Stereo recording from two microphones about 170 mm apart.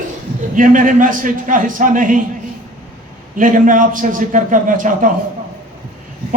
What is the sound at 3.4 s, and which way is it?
A man's voice, 50° right (ahead or behind).